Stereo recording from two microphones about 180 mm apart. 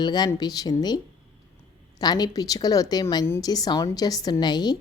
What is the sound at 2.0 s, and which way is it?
A woman's voice, 20° left (ahead or behind).